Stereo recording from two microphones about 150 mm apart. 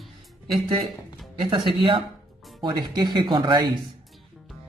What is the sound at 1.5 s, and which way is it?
Speech, 30° right (ahead or behind).